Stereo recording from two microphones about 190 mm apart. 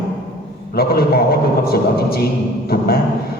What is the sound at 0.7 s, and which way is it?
A man's voice, 55° left (ahead or behind).